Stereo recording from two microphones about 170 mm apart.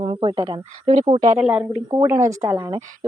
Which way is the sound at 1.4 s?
5° right (ahead or behind).